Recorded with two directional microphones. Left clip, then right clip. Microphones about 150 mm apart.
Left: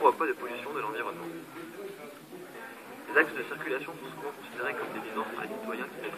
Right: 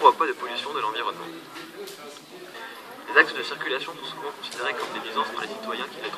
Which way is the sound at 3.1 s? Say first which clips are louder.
Right 7 dB; 35° right (ahead or behind).